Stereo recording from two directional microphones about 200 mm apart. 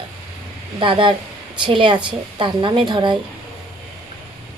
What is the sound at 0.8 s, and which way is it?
A woman's voice, 25° right (ahead or behind).